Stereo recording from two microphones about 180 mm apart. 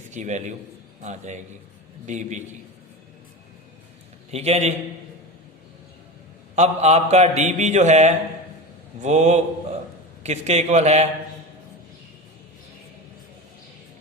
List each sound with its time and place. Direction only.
0.1 s a man's voice: 40° right (ahead or behind)
4.3 s a man's voice: 35° right (ahead or behind)
6.6 s a man's voice: 40° right (ahead or behind)